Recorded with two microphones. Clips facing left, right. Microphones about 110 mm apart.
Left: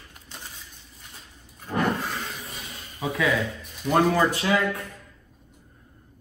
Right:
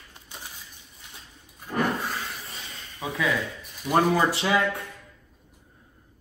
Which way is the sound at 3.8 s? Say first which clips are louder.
Left 1 dB; 10° right (ahead or behind).